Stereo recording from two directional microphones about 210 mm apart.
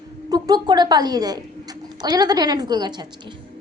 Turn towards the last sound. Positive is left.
turn(degrees=-20)  # may be behind; listen again after turning